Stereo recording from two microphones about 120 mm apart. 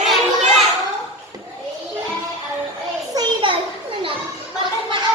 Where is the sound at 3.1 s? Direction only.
45° right (ahead or behind).